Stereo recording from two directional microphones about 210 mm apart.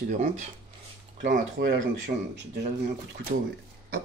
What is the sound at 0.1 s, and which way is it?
Speech, 35° right (ahead or behind).